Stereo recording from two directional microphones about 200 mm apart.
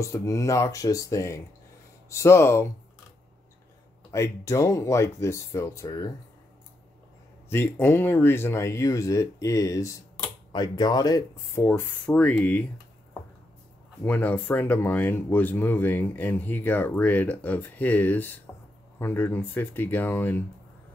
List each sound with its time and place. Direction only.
0.0 s speech: 15° left (ahead or behind)
4.1 s speech: 15° left (ahead or behind)
7.4 s speech: 10° left (ahead or behind)
14.0 s speech: 10° left (ahead or behind)